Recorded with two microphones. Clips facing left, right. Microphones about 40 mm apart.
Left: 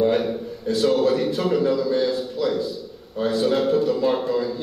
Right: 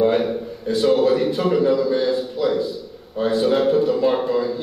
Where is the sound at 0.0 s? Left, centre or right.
Centre.